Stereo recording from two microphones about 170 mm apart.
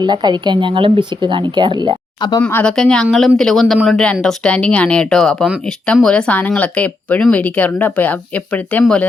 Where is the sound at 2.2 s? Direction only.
25° left (ahead or behind).